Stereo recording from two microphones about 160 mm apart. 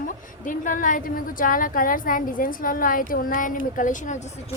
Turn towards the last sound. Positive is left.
turn(degrees=50)  # may be behind; listen again after turning